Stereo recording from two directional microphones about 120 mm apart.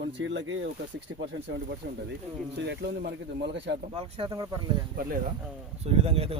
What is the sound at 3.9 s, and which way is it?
Speech, 55° right (ahead or behind).